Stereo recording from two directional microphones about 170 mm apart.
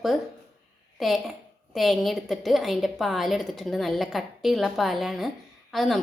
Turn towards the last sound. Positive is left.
turn(degrees=0)  # may be behind; listen again after turning